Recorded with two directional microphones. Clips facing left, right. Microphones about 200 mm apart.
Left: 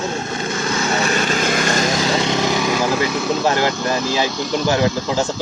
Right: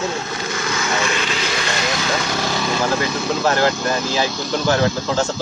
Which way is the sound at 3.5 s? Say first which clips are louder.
Even; 15° left (ahead or behind).